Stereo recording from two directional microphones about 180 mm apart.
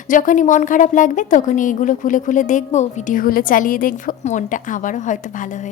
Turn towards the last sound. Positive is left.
turn(degrees=45)  # may be behind; listen again after turning